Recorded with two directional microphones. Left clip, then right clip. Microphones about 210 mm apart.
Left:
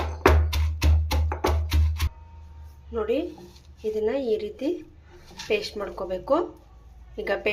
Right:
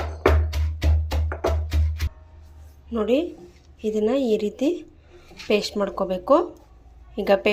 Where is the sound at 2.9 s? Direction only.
35° right (ahead or behind).